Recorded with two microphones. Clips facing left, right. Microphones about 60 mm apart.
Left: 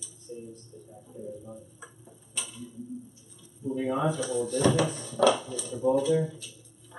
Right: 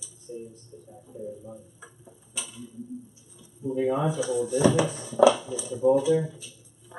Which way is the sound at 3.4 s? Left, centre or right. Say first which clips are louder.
Right 4 dB; centre.